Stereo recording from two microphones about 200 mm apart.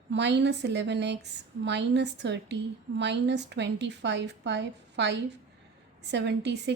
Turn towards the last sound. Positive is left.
turn(degrees=-60)  # may be behind; listen again after turning